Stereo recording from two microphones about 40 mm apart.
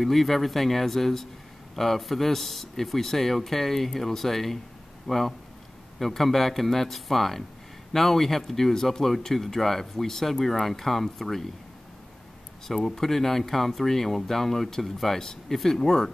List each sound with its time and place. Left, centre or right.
0.0 s a man's voice: centre
12.6 s speech: centre